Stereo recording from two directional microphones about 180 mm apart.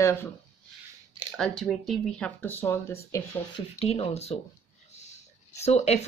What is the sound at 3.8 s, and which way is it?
Speech, 35° left (ahead or behind).